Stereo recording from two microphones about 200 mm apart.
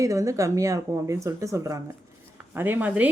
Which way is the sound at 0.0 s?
15° right (ahead or behind).